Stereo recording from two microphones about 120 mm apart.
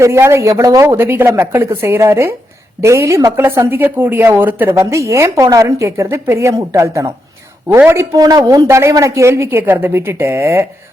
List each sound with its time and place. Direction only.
0.0 s a woman's voice: 20° right (ahead or behind)